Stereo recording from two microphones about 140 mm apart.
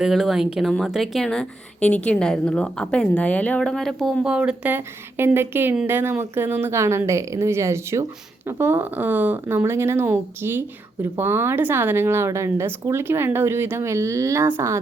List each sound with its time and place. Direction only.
0.0 s speech: centre (ahead or behind); by 14.8 s 20° right (ahead or behind)